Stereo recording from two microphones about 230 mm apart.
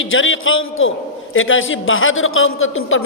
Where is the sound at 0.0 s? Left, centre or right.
Left.